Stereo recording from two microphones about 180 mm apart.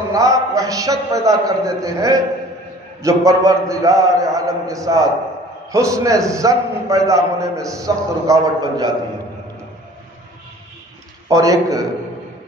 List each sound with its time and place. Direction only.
0.1 s a man's voice: 20° right (ahead or behind)
11.2 s a man's voice: 20° right (ahead or behind)